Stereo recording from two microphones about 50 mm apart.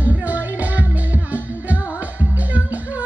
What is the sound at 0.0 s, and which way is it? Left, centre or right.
Music, right.